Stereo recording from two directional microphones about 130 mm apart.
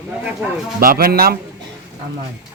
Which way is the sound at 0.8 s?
90° right.